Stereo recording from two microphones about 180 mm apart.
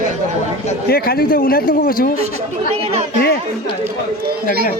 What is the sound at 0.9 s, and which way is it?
Speech, 60° left (ahead or behind).